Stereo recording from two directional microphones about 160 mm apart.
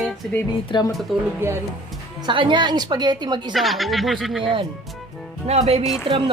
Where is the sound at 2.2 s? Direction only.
30° right (ahead or behind).